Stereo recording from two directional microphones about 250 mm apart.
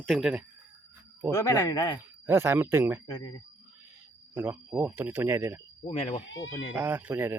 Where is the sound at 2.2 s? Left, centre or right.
Centre.